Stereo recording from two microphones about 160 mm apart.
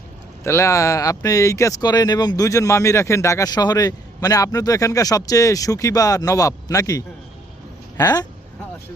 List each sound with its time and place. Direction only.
0.4 s speech: 20° left (ahead or behind)